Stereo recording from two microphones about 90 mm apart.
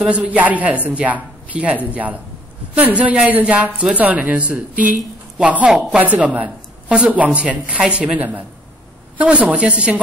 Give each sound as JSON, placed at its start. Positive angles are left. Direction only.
{"t": 0.0, "sound": "a woman's voice", "side_deg": -15}